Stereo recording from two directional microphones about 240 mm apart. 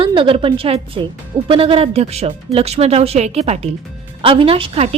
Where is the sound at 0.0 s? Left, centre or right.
Right.